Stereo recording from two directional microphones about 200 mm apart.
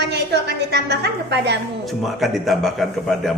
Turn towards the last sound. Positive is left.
turn(degrees=0)  # may be behind; listen again after turning